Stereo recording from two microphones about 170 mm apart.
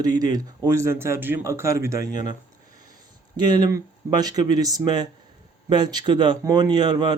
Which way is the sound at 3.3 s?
25° right (ahead or behind).